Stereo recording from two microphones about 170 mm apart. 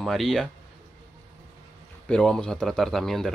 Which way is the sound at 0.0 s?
Centre (ahead or behind).